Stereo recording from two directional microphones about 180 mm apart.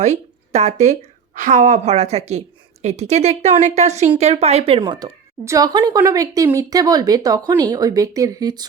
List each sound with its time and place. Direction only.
0.0 s speech: 40° right (ahead or behind); by 8.6 s 20° right (ahead or behind)